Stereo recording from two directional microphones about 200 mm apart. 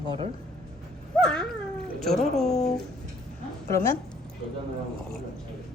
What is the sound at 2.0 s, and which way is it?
Speech, centre (ahead or behind).